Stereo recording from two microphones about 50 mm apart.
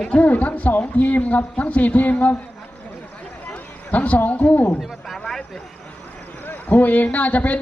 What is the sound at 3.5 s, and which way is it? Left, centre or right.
Speech, left.